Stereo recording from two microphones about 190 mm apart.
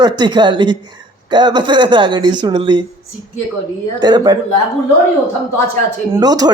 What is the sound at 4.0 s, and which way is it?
Speech, 20° right (ahead or behind).